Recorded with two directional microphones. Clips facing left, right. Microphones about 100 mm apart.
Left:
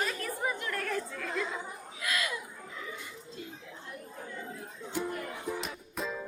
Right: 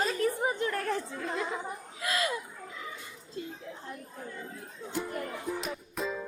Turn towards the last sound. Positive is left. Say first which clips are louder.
# right 2 dB
turn(degrees=0)  # may be behind; listen again after turning